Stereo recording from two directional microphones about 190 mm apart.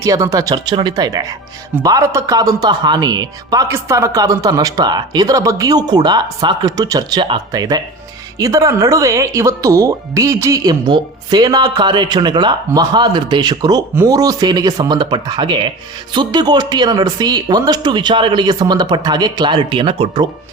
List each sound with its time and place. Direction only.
0.0 s speech: 15° right (ahead or behind)